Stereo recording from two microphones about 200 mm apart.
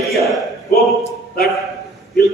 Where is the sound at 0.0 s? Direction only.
Centre (ahead or behind).